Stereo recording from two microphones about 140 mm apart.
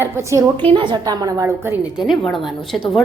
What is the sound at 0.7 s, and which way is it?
Speech, 35° right (ahead or behind).